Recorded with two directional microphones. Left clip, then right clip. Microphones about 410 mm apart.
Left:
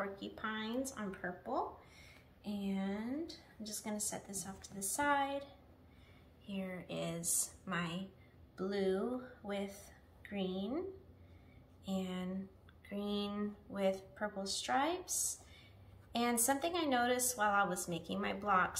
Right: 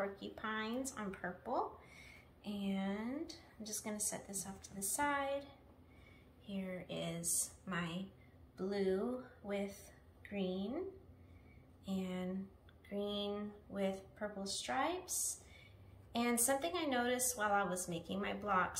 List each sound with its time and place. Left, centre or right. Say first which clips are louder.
0.0 s speech: even; centre
11.8 s speech: left 1 dB; centre